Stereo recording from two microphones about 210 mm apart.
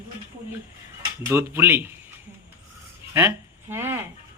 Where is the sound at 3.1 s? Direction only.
10° right (ahead or behind).